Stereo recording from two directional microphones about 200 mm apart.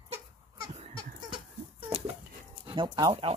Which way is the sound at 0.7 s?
30° right (ahead or behind).